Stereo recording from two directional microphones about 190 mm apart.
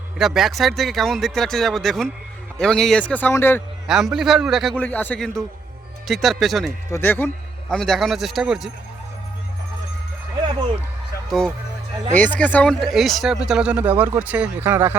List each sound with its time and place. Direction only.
0.2 s speech: centre (ahead or behind)
3.8 s speech: centre (ahead or behind)
11.3 s speech: 5° left (ahead or behind)